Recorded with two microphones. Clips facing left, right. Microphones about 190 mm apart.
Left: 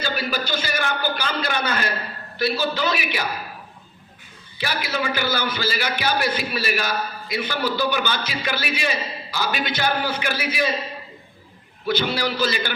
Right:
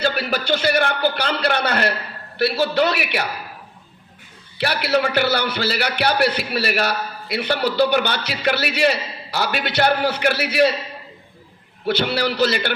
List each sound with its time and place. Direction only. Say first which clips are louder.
0.0 s a man's voice: right 4 dB; 65° right (ahead or behind)
4.5 s a man's voice: right 7 dB; 65° right (ahead or behind)
11.9 s a man's voice: right 2 dB; 65° right (ahead or behind)